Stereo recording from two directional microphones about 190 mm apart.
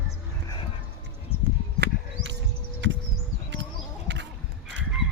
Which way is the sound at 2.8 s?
75° right (ahead or behind).